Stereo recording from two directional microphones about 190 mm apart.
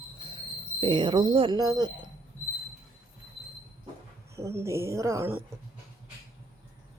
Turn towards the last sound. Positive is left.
turn(degrees=-15)  # may be behind; listen again after turning